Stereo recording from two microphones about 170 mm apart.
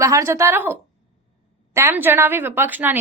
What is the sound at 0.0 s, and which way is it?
A woman's voice, 20° right (ahead or behind).